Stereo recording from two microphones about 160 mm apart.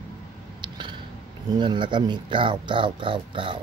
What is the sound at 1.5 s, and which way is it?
Speech, 30° right (ahead or behind).